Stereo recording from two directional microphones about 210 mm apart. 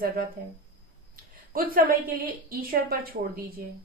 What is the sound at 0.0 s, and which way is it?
Speech, 45° right (ahead or behind).